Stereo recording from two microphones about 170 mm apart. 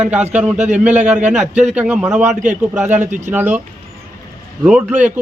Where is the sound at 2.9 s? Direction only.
45° right (ahead or behind).